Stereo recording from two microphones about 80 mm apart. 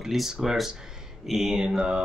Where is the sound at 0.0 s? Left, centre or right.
Centre.